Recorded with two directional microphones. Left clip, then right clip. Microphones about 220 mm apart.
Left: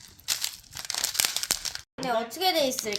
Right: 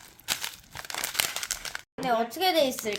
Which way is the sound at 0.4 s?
10° right (ahead or behind).